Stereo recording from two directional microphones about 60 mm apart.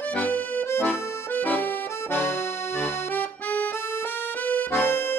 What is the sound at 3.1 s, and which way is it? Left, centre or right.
Accordion, left.